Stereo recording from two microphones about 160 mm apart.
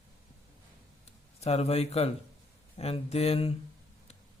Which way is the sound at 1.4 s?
40° left (ahead or behind).